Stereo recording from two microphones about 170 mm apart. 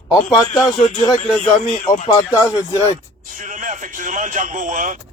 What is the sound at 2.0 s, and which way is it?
Speech, 25° left (ahead or behind).